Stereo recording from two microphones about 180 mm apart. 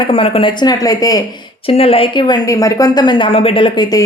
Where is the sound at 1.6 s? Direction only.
30° left (ahead or behind).